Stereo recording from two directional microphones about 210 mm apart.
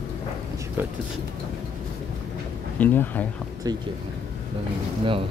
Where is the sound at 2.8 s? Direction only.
10° left (ahead or behind).